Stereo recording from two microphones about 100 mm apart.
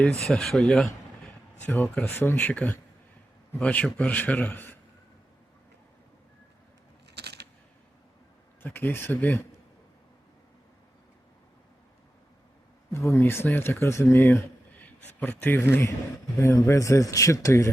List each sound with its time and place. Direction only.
0.3 s a man's voice: 5° left (ahead or behind); by 4.8 s 20° left (ahead or behind)
8.6 s speech: 20° left (ahead or behind)
12.9 s a man's voice: 25° left (ahead or behind)